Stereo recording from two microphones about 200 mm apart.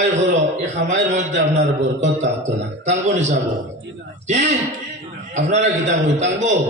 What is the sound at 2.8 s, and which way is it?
A man's voice, 35° right (ahead or behind).